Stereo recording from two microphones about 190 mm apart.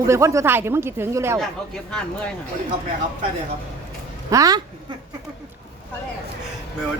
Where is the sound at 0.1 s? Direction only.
15° right (ahead or behind).